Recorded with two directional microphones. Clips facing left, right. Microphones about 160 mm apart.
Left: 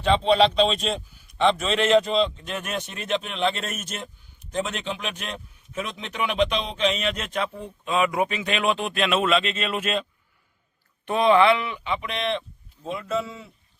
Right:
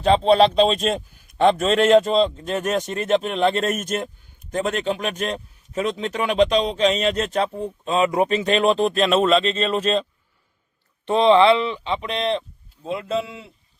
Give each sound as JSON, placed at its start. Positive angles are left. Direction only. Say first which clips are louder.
{"t": 0.0, "sound": "a man's voice", "louder": "right 4 dB", "side_deg": -40}
{"t": 11.1, "sound": "speech", "louder": "right 4 dB", "side_deg": -25}